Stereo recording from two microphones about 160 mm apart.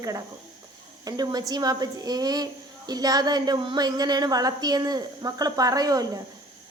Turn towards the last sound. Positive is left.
turn(degrees=-25)  # may be behind; listen again after turning